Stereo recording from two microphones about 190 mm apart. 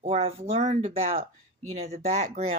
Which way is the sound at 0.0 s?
30° right (ahead or behind).